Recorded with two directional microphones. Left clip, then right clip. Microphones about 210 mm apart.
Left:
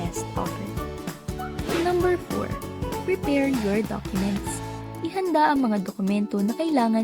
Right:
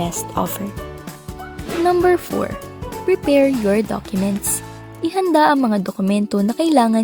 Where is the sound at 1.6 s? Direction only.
Centre (ahead or behind).